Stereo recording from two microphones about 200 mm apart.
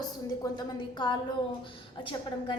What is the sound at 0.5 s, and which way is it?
Speech, 20° left (ahead or behind).